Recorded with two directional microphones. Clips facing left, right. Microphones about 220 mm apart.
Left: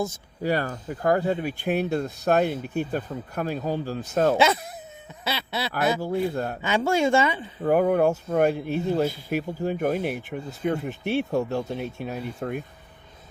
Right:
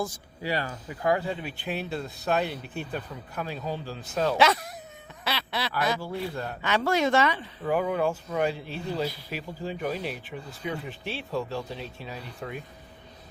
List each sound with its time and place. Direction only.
0.4 s speech: 45° left (ahead or behind)
4.4 s speech: 25° left (ahead or behind)
5.7 s speech: 45° left (ahead or behind)
6.6 s speech: 25° left (ahead or behind)
7.6 s speech: 50° left (ahead or behind)